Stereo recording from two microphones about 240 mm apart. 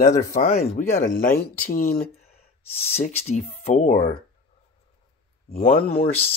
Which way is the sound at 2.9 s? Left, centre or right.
Left.